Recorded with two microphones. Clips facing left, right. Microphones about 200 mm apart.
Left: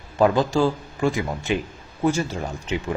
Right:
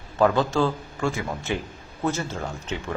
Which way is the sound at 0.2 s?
15° left (ahead or behind).